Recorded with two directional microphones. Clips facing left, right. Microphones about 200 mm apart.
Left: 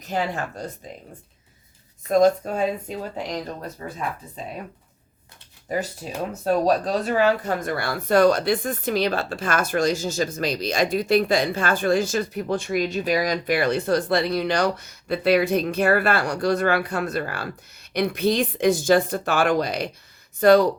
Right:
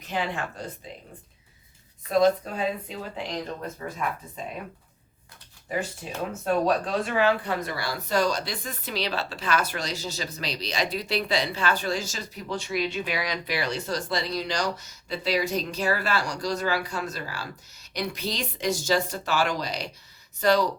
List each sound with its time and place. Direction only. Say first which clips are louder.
0.0 s speech: left 4 dB; 40° left (ahead or behind)
2.0 s speech: left 4 dB; 45° left (ahead or behind)
3.8 s speech: left 1 dB; 25° left (ahead or behind)
5.7 s speech: left 3 dB; 40° left (ahead or behind)